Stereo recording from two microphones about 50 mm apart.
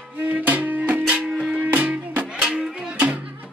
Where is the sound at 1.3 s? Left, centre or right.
Centre.